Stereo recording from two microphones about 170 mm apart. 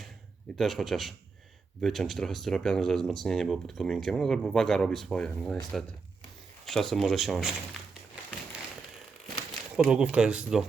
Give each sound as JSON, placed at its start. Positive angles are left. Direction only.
{"t": 0.5, "sound": "speech", "side_deg": 0}
{"t": 6.7, "sound": "speech", "side_deg": 0}
{"t": 9.7, "sound": "speech", "side_deg": -5}